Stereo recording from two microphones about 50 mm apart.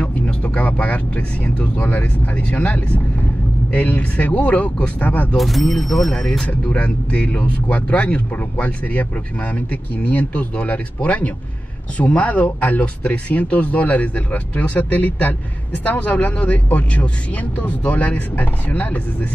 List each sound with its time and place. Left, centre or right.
0.0 s speech: left
5.4 s speech: centre
6.4 s speech: left